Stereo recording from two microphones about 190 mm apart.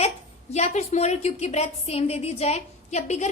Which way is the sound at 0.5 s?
35° left (ahead or behind).